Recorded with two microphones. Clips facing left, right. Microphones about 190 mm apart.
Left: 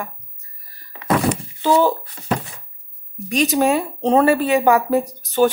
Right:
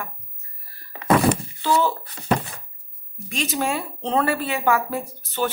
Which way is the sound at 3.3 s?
15° left (ahead or behind).